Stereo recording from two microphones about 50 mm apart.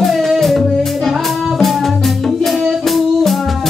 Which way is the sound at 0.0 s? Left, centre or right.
Centre.